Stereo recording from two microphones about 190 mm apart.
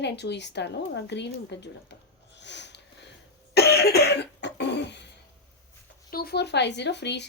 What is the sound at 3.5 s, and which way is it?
Cough, 60° left (ahead or behind).